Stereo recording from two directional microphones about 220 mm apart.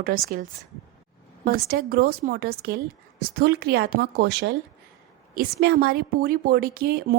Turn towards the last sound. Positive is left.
turn(degrees=-45)  # may be behind; listen again after turning